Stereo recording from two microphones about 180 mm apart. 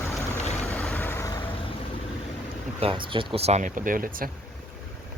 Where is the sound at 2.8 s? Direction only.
30° right (ahead or behind); by 4.3 s 50° right (ahead or behind).